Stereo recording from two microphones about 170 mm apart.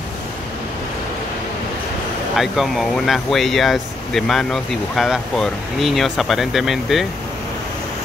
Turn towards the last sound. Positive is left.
turn(degrees=0)  # may be behind; listen again after turning